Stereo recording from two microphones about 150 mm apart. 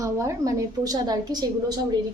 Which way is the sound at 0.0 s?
20° right (ahead or behind).